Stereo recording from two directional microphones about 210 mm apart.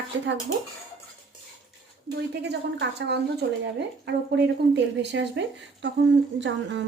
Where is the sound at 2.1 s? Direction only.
55° right (ahead or behind).